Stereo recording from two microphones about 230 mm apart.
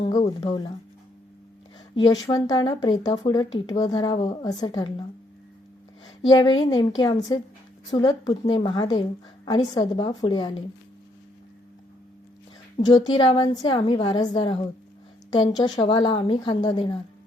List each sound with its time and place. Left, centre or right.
0.3 s a woman's voice: left
2.2 s a woman's voice: centre
6.2 s a woman's voice: centre
12.7 s a woman's voice: centre